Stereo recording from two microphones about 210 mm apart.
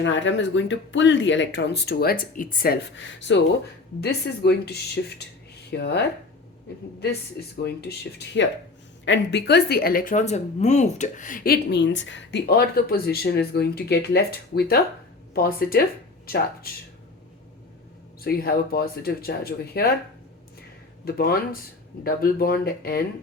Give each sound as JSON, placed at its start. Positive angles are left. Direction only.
{"t": 0.0, "sound": "speech", "side_deg": 60}
{"t": 2.9, "sound": "speech", "side_deg": 60}
{"t": 7.6, "sound": "speech", "side_deg": 50}
{"t": 9.0, "sound": "speech", "side_deg": 60}
{"t": 18.2, "sound": "speech", "side_deg": 45}
{"t": 20.6, "sound": "a sound", "side_deg": 45}
{"t": 22.0, "sound": "speech", "side_deg": 45}